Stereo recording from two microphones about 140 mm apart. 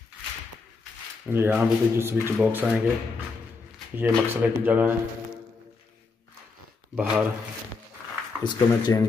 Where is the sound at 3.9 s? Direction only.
15° right (ahead or behind).